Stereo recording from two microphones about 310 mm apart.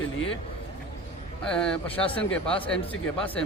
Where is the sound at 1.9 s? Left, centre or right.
Centre.